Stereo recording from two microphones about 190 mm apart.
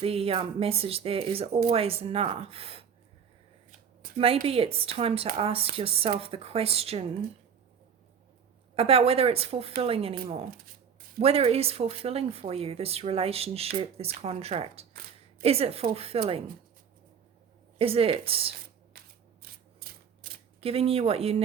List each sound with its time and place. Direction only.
0.0 s speech: 30° right (ahead or behind)
4.2 s speech: 30° right (ahead or behind)
8.7 s speech: 30° right (ahead or behind)
11.2 s speech: 30° right (ahead or behind)
17.7 s speech: 30° right (ahead or behind)
19.4 s typewriter: 50° right (ahead or behind)
20.6 s speech: 30° right (ahead or behind)